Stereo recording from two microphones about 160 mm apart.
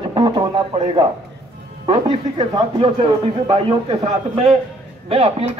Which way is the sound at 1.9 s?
30° right (ahead or behind).